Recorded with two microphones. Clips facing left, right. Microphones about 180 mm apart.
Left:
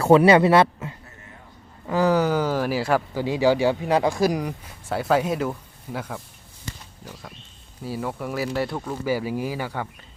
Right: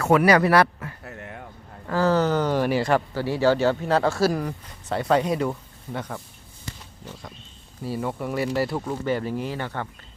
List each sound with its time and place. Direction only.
0.0 s speech: 30° left (ahead or behind)
1.0 s a sound: 75° right (ahead or behind)
1.9 s speech: 15° left (ahead or behind)
4.7 s speech: 5° left (ahead or behind)